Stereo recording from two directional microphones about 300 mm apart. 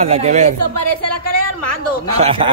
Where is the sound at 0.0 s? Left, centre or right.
Right.